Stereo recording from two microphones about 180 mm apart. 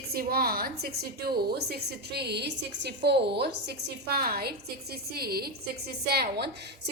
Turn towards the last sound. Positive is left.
turn(degrees=-65)  # may be behind; listen again after turning